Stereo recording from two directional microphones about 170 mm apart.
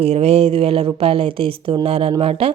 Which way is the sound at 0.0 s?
35° right (ahead or behind).